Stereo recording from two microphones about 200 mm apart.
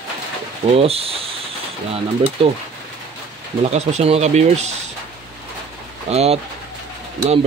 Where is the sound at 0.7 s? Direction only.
30° right (ahead or behind).